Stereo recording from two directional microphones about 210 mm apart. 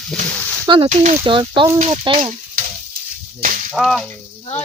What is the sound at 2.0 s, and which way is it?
Speech, 25° right (ahead or behind).